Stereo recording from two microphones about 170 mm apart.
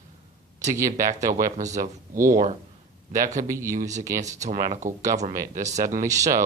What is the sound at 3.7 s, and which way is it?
Speech, 50° right (ahead or behind).